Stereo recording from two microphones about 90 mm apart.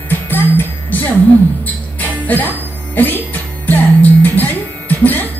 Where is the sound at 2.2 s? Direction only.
20° left (ahead or behind).